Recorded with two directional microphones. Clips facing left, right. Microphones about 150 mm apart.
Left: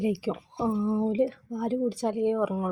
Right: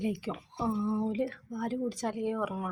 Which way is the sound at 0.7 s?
30° left (ahead or behind).